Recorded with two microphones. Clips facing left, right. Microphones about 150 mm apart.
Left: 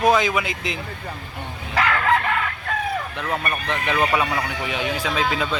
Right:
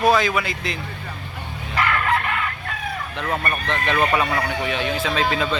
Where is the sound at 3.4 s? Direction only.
10° left (ahead or behind).